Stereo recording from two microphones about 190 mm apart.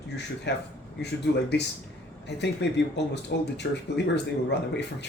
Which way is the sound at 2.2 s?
65° left (ahead or behind).